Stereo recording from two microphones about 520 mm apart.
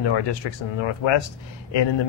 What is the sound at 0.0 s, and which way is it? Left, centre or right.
Speech, left.